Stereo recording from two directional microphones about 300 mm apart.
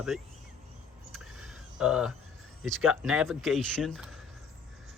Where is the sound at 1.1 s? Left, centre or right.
Centre.